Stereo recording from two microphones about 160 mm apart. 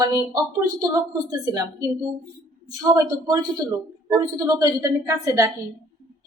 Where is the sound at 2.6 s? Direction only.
25° right (ahead or behind).